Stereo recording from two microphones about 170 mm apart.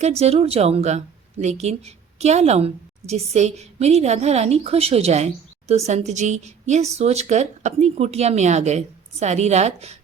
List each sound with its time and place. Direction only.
0.2 s speech: 35° right (ahead or behind)